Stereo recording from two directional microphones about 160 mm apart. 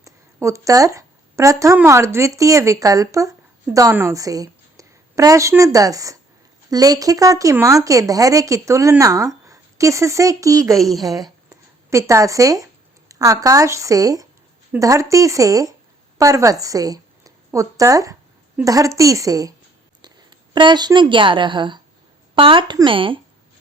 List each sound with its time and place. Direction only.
0.0 s a woman's voice: 20° right (ahead or behind)